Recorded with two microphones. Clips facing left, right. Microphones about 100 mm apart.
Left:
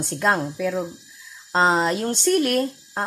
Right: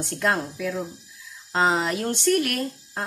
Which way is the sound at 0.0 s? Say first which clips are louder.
Left 3 dB; 25° left (ahead or behind).